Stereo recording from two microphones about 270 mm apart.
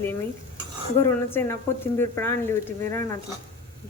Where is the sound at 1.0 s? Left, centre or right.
Centre.